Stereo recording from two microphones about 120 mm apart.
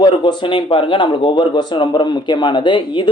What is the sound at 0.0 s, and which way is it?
A man's voice, 40° left (ahead or behind).